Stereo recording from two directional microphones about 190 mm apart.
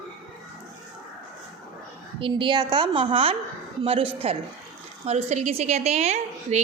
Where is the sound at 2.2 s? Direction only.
25° right (ahead or behind).